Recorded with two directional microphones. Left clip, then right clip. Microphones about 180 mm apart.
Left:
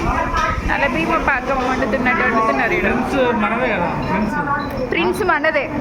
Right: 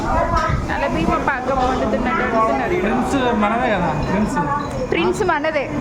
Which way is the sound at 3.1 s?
75° right (ahead or behind).